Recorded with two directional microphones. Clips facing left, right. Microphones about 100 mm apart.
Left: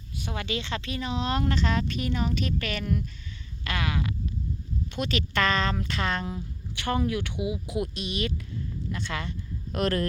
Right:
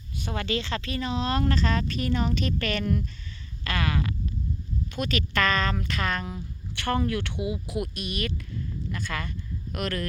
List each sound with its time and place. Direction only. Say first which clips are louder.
0.2 s speech: right 3 dB; 10° left (ahead or behind)
7.8 s speech: left 3 dB; 20° left (ahead or behind)
9.7 s speech: left 4 dB; 35° left (ahead or behind)